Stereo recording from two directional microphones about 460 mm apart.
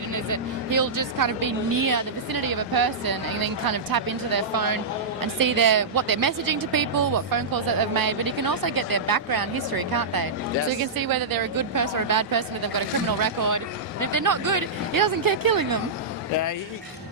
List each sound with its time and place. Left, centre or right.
0.3 s a woman's voice: right